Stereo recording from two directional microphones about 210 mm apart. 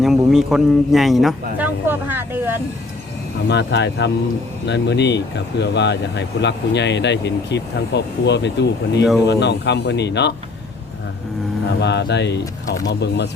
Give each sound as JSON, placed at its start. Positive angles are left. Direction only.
{"t": 0.0, "sound": "speech", "side_deg": 0}
{"t": 3.5, "sound": "speech", "side_deg": 55}
{"t": 11.8, "sound": "speech", "side_deg": 55}